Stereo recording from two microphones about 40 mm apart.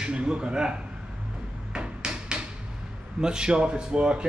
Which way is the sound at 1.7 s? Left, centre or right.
Right.